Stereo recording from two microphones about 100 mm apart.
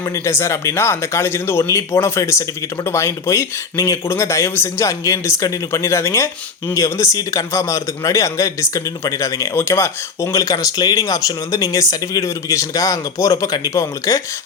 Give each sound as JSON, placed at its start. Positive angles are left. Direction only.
{"t": 0.0, "sound": "speech", "side_deg": 30}